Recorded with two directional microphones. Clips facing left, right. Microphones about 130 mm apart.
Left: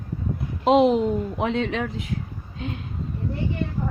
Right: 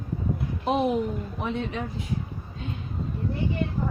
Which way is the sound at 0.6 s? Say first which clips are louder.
Left 7 dB; 90° left.